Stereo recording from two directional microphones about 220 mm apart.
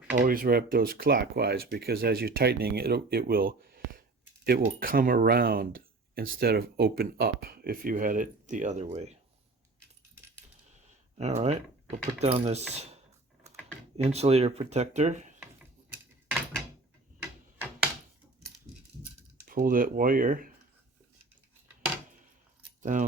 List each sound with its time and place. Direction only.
0.2 s speech: 40° right (ahead or behind)
11.2 s speech: 30° right (ahead or behind)
13.9 s speech: 30° right (ahead or behind)
16.3 s door: 5° left (ahead or behind)
19.5 s speech: 40° right (ahead or behind)
22.8 s speech: 35° right (ahead or behind)